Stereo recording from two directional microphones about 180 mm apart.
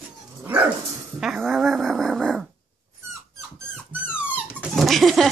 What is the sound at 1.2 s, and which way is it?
Dog, centre (ahead or behind).